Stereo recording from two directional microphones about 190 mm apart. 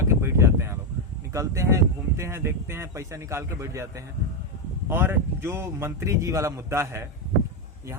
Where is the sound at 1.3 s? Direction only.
15° right (ahead or behind).